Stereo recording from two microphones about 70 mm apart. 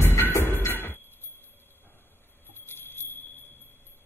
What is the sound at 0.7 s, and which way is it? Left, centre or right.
Glass, left.